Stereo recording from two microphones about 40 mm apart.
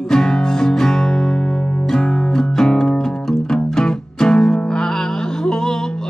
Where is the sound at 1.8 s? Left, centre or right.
Centre.